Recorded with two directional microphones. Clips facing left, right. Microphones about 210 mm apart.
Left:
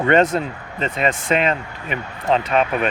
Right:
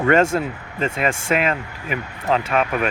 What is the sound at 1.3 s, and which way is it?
Speech, 30° left (ahead or behind).